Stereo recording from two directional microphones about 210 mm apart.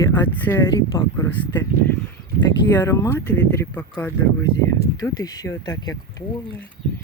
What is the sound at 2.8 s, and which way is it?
Speech, 10° left (ahead or behind).